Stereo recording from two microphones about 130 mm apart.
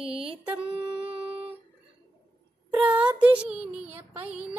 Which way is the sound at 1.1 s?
45° right (ahead or behind).